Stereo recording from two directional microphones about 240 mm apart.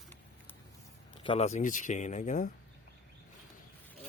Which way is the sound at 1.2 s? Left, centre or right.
Left.